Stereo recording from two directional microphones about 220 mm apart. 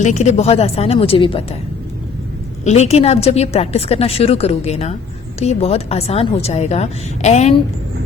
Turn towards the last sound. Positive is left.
turn(degrees=30)  # may be behind; listen again after turning